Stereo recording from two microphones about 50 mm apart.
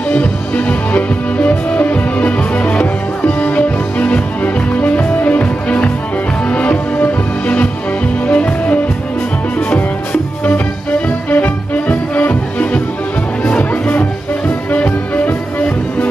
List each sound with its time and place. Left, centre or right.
0.1 s music: left